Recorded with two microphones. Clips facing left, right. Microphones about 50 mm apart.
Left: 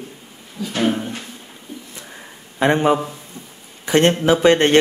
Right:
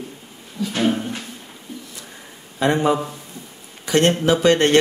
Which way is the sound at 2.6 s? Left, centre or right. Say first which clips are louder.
Left 2 dB; left.